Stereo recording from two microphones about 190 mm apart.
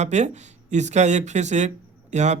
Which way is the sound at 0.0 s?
35° right (ahead or behind).